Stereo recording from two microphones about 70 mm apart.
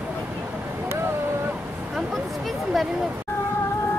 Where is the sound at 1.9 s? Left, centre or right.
Centre.